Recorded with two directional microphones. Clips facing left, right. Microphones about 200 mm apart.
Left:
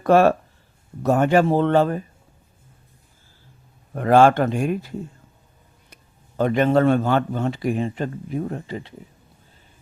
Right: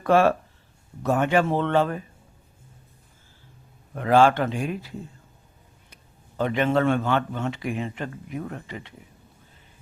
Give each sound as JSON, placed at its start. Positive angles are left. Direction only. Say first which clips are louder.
{"t": 0.0, "sound": "speech", "louder": "left 4 dB", "side_deg": 40}
{"t": 3.9, "sound": "a man's voice", "louder": "left 4 dB", "side_deg": 45}